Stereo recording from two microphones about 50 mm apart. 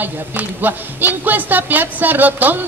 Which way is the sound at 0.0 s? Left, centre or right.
Right.